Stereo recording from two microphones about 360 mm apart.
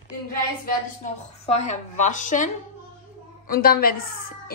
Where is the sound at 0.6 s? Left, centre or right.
Centre.